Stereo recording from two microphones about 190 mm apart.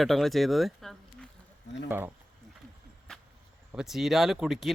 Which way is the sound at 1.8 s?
10° right (ahead or behind).